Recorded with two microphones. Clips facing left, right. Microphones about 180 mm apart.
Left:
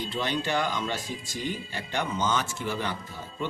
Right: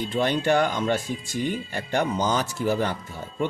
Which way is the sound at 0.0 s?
50° right (ahead or behind).